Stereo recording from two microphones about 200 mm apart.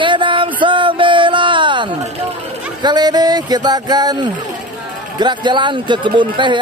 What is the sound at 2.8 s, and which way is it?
Speech, 20° right (ahead or behind).